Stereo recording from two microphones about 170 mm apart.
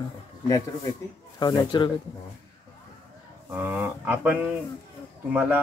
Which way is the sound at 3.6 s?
10° right (ahead or behind).